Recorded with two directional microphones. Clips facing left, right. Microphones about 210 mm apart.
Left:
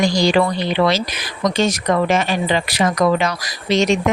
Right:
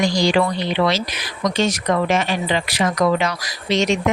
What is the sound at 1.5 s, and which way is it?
Speech, 40° left (ahead or behind).